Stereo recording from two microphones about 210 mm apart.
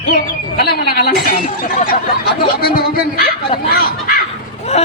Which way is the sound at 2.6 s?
50° left (ahead or behind).